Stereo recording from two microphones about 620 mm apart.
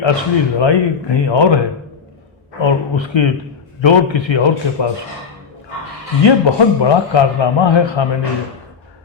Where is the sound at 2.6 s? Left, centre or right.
Left.